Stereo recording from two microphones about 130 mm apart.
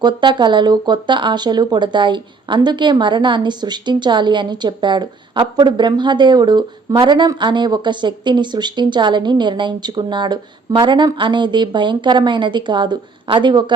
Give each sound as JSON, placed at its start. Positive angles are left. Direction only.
{"t": 0.0, "sound": "speech", "side_deg": -35}